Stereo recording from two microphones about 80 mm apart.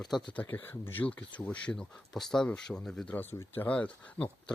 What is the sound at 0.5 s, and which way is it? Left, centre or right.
Speech, left.